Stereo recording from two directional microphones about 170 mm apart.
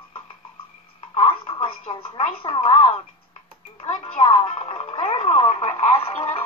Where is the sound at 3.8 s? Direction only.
35° left (ahead or behind).